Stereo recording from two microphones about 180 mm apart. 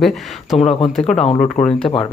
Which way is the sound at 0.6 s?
35° left (ahead or behind).